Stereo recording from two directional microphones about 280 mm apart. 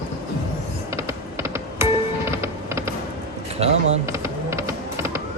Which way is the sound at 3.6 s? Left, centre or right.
Right.